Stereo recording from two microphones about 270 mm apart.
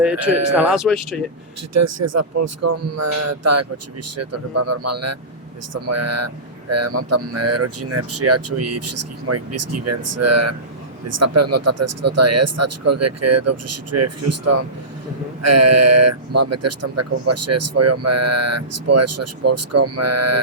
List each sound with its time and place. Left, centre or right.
0.3 s speech: right
0.7 s speech: centre
1.7 s speech: right